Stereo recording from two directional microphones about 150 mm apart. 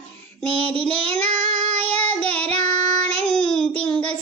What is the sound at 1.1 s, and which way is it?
Child singing, 10° left (ahead or behind).